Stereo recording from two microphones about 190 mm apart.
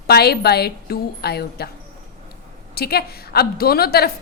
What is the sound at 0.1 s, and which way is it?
A woman's voice, 55° left (ahead or behind).